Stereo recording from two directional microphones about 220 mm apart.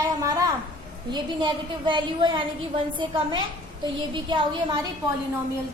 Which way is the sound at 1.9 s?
20° right (ahead or behind).